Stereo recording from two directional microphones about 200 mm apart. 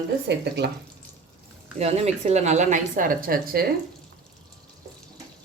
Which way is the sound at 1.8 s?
30° right (ahead or behind).